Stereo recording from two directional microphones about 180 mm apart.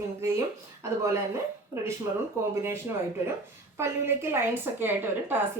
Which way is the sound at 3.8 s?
15° right (ahead or behind).